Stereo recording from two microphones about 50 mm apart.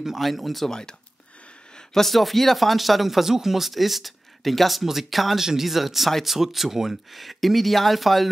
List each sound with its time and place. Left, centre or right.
0.0 s speech: centre
2.0 s speech: centre